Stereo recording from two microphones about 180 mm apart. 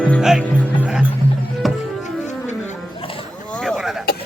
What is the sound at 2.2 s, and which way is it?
Wild animals, 40° left (ahead or behind).